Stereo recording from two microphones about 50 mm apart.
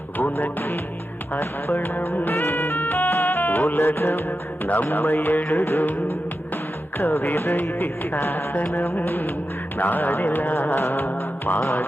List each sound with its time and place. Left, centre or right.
0.2 s music: left
2.3 s music: left
2.8 s music: left
4.3 s music: left
5.5 s music: left
7.0 s music: left